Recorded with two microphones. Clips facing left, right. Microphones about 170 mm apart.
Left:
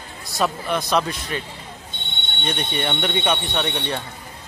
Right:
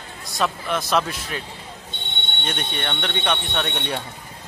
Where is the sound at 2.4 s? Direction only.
Centre (ahead or behind).